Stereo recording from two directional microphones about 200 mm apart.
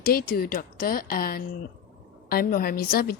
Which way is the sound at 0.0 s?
45° left (ahead or behind).